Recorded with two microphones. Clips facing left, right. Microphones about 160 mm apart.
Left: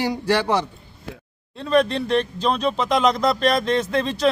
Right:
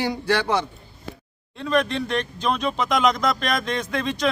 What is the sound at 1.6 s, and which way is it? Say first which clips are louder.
Speech: left 3 dB; 35° left (ahead or behind).